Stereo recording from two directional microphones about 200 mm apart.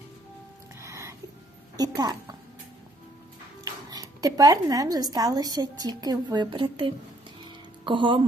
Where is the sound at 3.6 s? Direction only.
20° right (ahead or behind).